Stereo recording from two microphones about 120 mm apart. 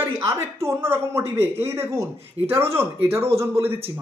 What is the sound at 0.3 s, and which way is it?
Speech, 20° right (ahead or behind).